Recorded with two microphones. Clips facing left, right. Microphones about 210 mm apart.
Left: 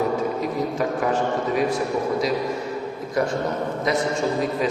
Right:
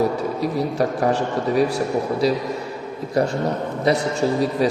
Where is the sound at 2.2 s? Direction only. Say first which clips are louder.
Right 3 dB; 35° right (ahead or behind).